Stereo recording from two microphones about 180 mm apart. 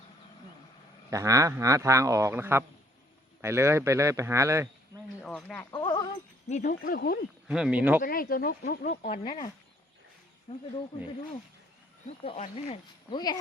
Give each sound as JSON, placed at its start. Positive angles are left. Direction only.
{"t": 1.1, "sound": "speech", "side_deg": -15}
{"t": 5.2, "sound": "a sound", "side_deg": 5}
{"t": 5.7, "sound": "sheep", "side_deg": 25}
{"t": 6.5, "sound": "speech", "side_deg": 50}
{"t": 7.4, "sound": "speech", "side_deg": -5}
{"t": 8.0, "sound": "speech", "side_deg": 55}
{"t": 10.5, "sound": "speech", "side_deg": 40}
{"t": 12.0, "sound": "speech", "side_deg": 35}
{"t": 13.1, "sound": "speech", "side_deg": 20}